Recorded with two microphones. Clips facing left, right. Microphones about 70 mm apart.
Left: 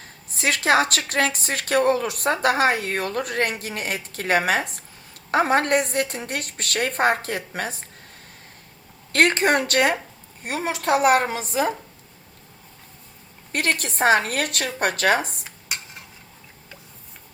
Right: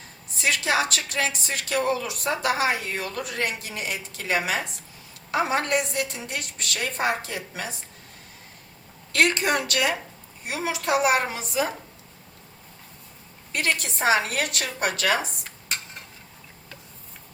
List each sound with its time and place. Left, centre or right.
0.3 s a woman's voice: left
9.1 s a woman's voice: left
13.5 s a woman's voice: left
15.4 s stir: centre